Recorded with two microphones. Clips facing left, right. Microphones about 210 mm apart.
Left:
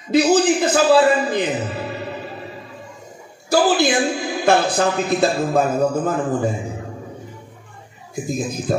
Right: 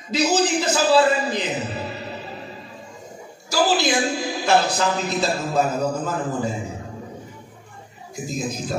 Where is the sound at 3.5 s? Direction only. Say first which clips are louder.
Left 4 dB; 55° left (ahead or behind).